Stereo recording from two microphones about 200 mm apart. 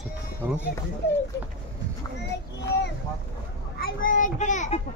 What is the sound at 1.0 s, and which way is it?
Speech, 55° left (ahead or behind).